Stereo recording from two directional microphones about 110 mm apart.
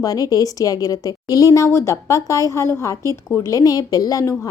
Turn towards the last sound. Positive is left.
turn(degrees=30)  # may be behind; listen again after turning